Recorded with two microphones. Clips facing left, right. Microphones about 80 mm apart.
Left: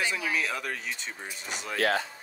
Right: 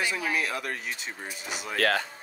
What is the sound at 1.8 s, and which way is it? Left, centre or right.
Speech, right.